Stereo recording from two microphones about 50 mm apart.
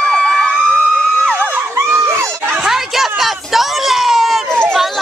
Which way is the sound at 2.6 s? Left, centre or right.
Centre.